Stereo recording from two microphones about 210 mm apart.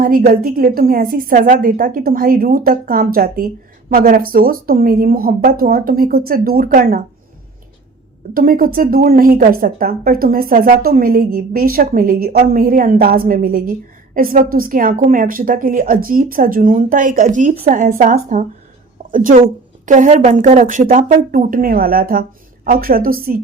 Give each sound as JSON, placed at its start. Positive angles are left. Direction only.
{"t": 0.0, "sound": "a woman's voice", "side_deg": -40}
{"t": 8.3, "sound": "a woman's voice", "side_deg": -45}